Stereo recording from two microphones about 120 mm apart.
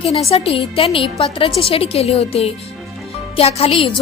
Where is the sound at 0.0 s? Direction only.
55° left (ahead or behind).